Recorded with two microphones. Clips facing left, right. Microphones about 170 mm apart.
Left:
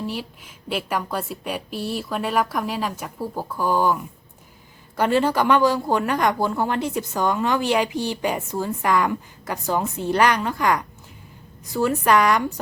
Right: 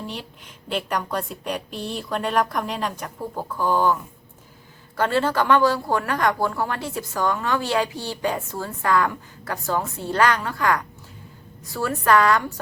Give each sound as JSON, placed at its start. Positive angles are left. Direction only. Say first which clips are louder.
{"t": 0.0, "sound": "a woman's voice", "louder": "left 4 dB", "side_deg": 5}
{"t": 4.9, "sound": "speech", "louder": "left 2 dB", "side_deg": 15}